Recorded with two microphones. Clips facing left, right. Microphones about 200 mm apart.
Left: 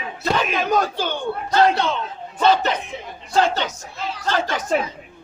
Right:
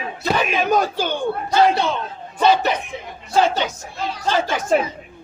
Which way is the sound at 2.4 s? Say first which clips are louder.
Right 1 dB; 10° right (ahead or behind).